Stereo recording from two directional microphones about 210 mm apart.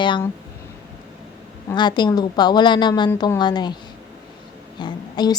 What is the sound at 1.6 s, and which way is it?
A woman's voice, 20° left (ahead or behind).